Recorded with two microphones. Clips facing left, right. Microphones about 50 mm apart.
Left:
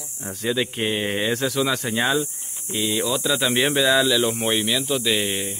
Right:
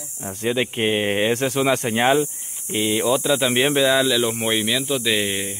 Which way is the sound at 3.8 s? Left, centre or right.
Centre.